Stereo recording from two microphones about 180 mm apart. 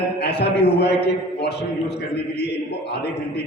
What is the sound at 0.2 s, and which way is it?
A man's voice, 65° left (ahead or behind).